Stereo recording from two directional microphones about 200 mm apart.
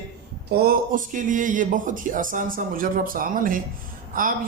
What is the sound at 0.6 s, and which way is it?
A man's voice, 45° right (ahead or behind).